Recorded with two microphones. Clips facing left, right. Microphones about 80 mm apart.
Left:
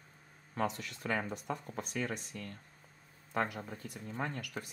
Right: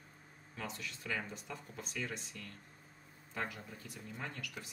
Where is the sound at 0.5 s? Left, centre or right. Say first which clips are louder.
Left 9 dB; left.